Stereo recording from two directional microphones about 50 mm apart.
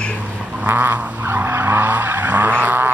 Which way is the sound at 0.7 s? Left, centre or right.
Right.